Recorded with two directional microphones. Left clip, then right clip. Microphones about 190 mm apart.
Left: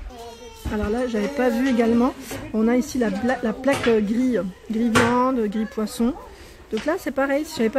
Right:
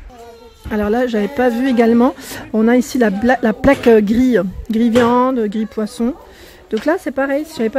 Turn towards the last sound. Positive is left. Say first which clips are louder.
# right 4 dB
turn(degrees=-10)  # may be behind; listen again after turning